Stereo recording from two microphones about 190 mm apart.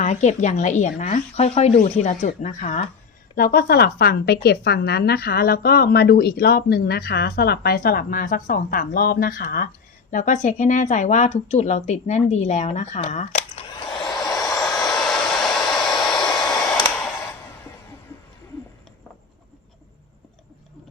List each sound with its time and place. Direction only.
0.0 s speech: 40° left (ahead or behind)
3.3 s a woman's voice: 50° left (ahead or behind); by 13.8 s 35° left (ahead or behind)
14.0 s hair dryer: centre (ahead or behind)